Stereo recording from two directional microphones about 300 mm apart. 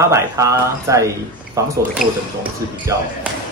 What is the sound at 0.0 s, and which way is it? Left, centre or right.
Speech, centre.